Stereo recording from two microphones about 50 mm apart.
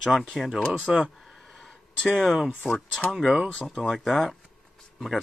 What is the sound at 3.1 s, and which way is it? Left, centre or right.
Speech, centre.